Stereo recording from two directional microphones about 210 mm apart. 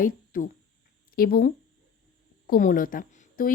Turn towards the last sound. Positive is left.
turn(degrees=40)  # may be behind; listen again after turning